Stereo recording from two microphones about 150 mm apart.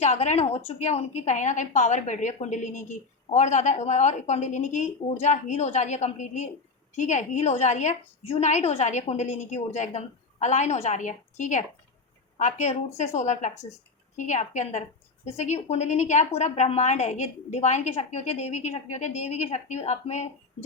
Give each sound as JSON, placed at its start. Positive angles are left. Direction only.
{"t": 0.0, "sound": "a woman's voice", "side_deg": 45}